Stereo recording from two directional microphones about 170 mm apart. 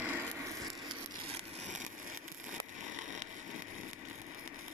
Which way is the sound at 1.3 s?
45° right (ahead or behind).